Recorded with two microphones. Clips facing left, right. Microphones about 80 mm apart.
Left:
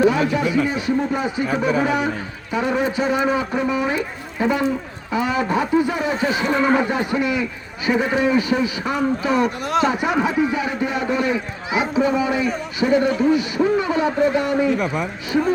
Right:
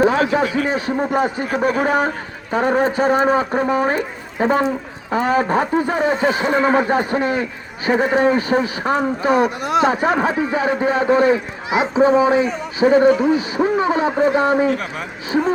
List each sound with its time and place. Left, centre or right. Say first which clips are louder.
0.0 s a man's voice: right 2 dB; right
6.5 s speech: even; right
6.7 s speech: right 3 dB; right
9.4 s speech: right 2 dB; centre
9.8 s speech: right 3 dB; right